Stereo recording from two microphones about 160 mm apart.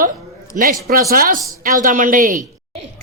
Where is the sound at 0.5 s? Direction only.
55° right (ahead or behind).